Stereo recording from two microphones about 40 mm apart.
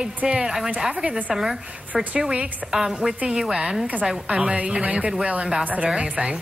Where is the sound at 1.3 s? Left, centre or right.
Centre.